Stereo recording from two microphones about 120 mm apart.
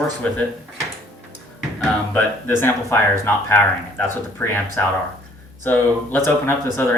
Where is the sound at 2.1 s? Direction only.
15° left (ahead or behind).